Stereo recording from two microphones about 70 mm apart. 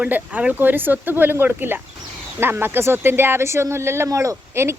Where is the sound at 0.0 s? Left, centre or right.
Right.